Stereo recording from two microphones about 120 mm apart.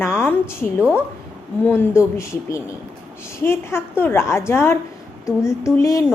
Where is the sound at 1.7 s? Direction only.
20° left (ahead or behind).